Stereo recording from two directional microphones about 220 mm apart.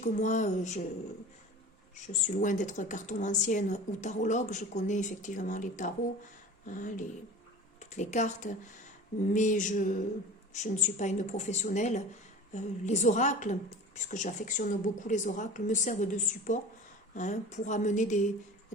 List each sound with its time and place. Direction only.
0.0 s a woman's voice: 35° left (ahead or behind)
2.0 s a woman's voice: 35° left (ahead or behind)